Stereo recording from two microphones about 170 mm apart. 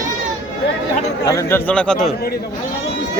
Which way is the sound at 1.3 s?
15° left (ahead or behind).